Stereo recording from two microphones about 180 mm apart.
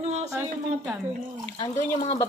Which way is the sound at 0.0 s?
40° right (ahead or behind).